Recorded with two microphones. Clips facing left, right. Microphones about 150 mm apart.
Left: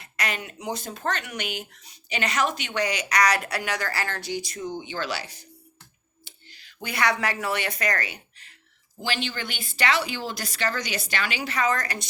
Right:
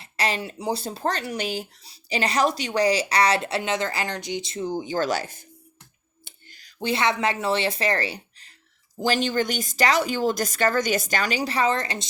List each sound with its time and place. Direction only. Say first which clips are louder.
0.0 s speech: right 5 dB; 30° right (ahead or behind); by 5.5 s 50° right (ahead or behind)
6.2 s clicking: even; 45° right (ahead or behind)
6.7 s speech: right 3 dB; 25° right (ahead or behind)